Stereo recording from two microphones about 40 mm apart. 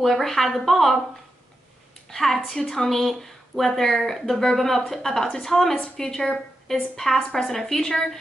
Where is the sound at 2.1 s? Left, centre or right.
Centre.